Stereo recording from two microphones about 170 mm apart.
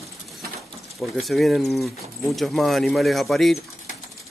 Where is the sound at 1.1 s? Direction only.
Centre (ahead or behind).